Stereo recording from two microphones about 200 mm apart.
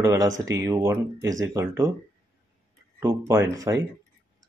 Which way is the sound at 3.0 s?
15° right (ahead or behind).